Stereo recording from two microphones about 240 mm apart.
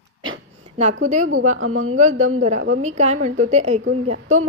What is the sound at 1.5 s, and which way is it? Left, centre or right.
Speech, right.